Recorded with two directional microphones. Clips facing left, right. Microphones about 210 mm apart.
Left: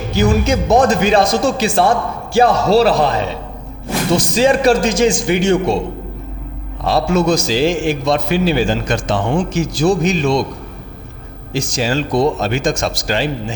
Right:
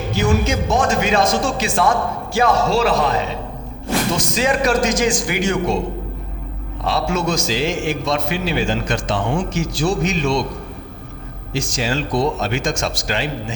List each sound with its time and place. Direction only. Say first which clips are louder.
0.2 s a man's voice: left 4 dB; 35° left (ahead or behind)
4.2 s a man's voice: left 5 dB; 30° left (ahead or behind)
6.8 s a man's voice: left 6 dB; 35° left (ahead or behind)
11.5 s a man's voice: left 4 dB; 40° left (ahead or behind)